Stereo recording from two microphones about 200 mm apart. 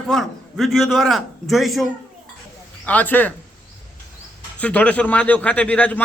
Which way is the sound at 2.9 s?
10° left (ahead or behind).